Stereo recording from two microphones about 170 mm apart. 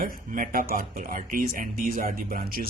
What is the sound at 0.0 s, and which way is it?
Speech, 55° right (ahead or behind).